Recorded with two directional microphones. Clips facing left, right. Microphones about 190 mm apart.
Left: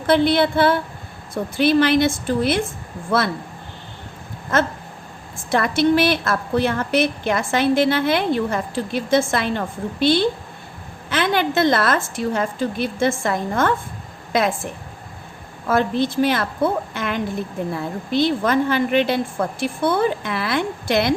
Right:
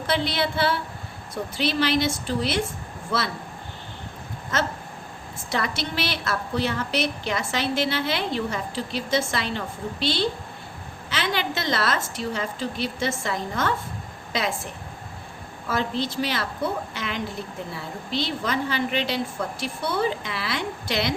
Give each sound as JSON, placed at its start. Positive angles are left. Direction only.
{"t": 0.1, "sound": "a woman's voice", "side_deg": 55}
{"t": 4.5, "sound": "a woman's voice", "side_deg": 55}
{"t": 15.6, "sound": "a woman's voice", "side_deg": 55}